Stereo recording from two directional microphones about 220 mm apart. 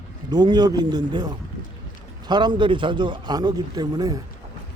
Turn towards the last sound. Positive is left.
turn(degrees=-15)  # may be behind; listen again after turning